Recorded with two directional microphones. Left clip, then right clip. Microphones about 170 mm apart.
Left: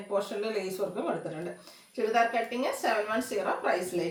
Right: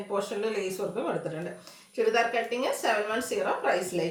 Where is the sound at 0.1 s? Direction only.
15° right (ahead or behind).